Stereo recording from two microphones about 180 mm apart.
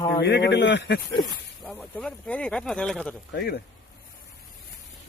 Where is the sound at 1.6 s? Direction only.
Centre (ahead or behind).